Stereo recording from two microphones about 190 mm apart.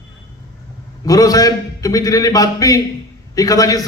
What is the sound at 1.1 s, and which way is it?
A man's voice, 20° left (ahead or behind).